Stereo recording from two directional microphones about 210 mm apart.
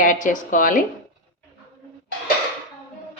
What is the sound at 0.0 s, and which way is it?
Speech, 40° left (ahead or behind).